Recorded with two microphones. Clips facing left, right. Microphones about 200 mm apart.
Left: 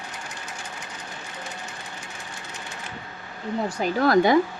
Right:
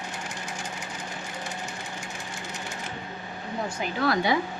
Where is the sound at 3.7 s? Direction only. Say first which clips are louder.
Left 5 dB; 40° left (ahead or behind).